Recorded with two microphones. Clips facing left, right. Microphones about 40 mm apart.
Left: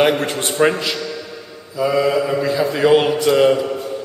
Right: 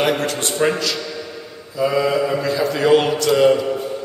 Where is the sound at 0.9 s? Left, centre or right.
Centre.